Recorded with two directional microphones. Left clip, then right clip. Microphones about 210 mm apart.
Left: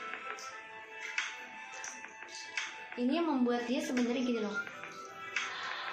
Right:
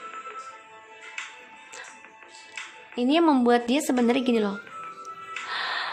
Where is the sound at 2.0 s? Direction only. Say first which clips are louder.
Even; 10° left (ahead or behind).